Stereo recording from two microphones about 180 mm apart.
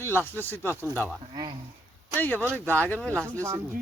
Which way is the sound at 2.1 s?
10° left (ahead or behind).